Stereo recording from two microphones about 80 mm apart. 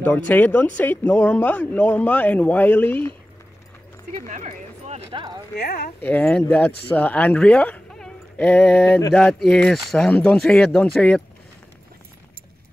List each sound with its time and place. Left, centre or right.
0.0 s speech: left
5.1 s speech: right
6.0 s speech: centre
9.1 s speech: centre